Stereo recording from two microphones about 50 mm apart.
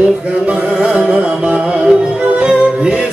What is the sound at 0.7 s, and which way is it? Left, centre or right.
Music, right.